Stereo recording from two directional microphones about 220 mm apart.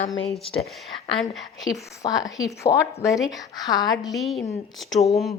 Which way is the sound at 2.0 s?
15° left (ahead or behind).